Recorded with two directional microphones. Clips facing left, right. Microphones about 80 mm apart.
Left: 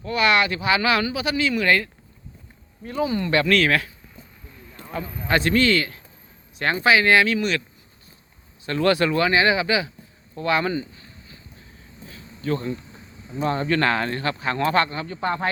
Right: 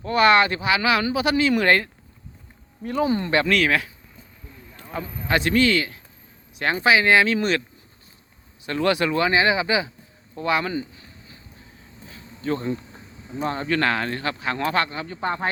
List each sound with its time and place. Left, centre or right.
0.0 s speech: right
0.6 s speech: centre
1.2 s speech: right
3.2 s speech: right
3.5 s speech: centre
4.9 s speech: centre
7.3 s speech: right
8.6 s speech: centre
10.8 s a sound: centre
12.1 s insect: centre
13.3 s speech: centre